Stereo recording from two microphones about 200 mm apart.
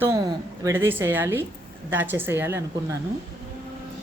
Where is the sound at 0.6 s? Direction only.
10° right (ahead or behind).